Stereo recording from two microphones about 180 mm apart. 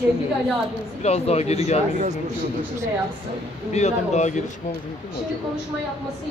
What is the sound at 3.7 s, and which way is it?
Speech, 40° left (ahead or behind).